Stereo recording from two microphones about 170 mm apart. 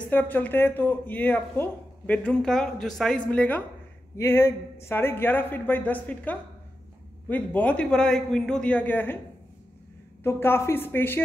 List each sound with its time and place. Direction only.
0.0 s speech: 10° left (ahead or behind)
10.2 s speech: 15° left (ahead or behind)